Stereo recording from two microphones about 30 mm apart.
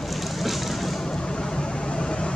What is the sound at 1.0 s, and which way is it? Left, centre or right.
Vehicle, left.